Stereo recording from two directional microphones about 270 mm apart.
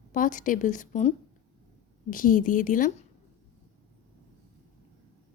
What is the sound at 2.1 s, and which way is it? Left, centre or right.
Speech, left.